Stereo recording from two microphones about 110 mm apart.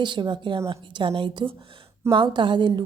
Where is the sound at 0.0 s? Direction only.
45° right (ahead or behind).